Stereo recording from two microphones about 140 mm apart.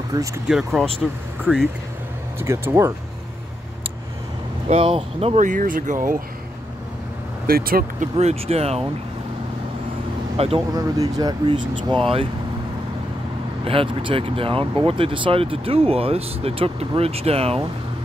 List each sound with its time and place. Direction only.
0.1 s speech: 25° right (ahead or behind)
0.5 s speech: centre (ahead or behind)
2.3 s speech: 20° right (ahead or behind)
4.6 s speech: 45° right (ahead or behind)
5.4 s speech: 70° right (ahead or behind)
7.4 s speech: 90° right
8.2 s speech: 45° right (ahead or behind)
10.3 s speech: 45° right (ahead or behind)
10.8 s speech: 25° right (ahead or behind)
13.7 s speech: 40° right (ahead or behind)